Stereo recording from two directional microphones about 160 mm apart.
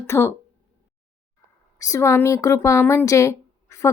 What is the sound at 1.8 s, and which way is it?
A woman's voice, 20° left (ahead or behind).